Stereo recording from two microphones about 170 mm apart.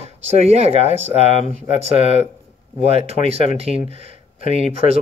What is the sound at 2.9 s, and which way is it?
Speech, 35° right (ahead or behind).